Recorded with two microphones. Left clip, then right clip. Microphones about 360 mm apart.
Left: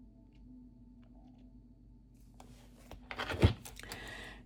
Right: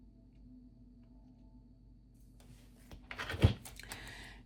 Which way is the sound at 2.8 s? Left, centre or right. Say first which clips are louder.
Left 3 dB; centre.